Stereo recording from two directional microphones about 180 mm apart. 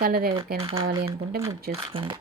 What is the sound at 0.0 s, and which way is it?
Speech, 55° right (ahead or behind).